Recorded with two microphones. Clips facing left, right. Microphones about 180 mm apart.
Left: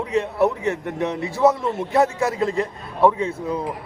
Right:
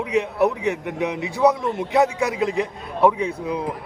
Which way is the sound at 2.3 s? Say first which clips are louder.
Even; 15° right (ahead or behind).